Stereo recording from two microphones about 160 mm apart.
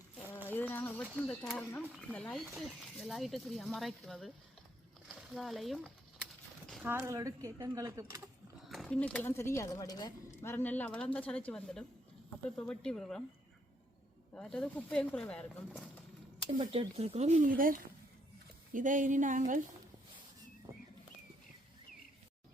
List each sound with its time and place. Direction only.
0.4 s a sound: 10° left (ahead or behind)
1.3 s speech: 5° left (ahead or behind)
1.8 s speech: centre (ahead or behind)
6.8 s speech: 15° right (ahead or behind)
8.6 s speech: centre (ahead or behind)
14.3 s speech: 5° left (ahead or behind)
16.6 s speech: 35° right (ahead or behind); by 19.6 s 55° right (ahead or behind)